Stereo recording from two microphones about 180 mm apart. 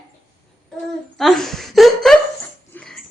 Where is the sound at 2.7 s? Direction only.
Centre (ahead or behind).